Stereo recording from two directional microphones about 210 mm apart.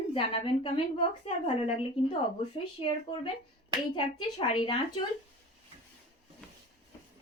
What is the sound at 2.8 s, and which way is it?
A woman's voice, 25° left (ahead or behind).